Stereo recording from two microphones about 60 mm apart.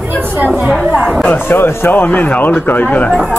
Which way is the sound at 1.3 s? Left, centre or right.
Left.